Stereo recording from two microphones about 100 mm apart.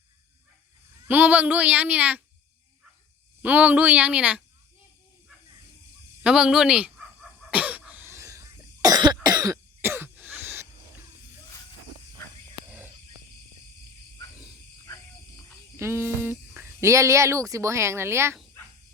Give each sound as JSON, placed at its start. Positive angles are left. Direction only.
{"t": 1.0, "sound": "a child's voice", "side_deg": -15}
{"t": 3.4, "sound": "a child's voice", "side_deg": -15}
{"t": 6.2, "sound": "a child's voice", "side_deg": -5}
{"t": 7.5, "sound": "a sound", "side_deg": -15}
{"t": 8.0, "sound": "cough", "side_deg": -30}
{"t": 9.8, "sound": "throat clearing", "side_deg": -25}
{"t": 15.8, "sound": "speech", "side_deg": -25}